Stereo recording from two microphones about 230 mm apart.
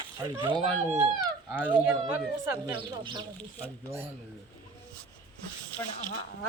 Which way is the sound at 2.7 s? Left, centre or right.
Right.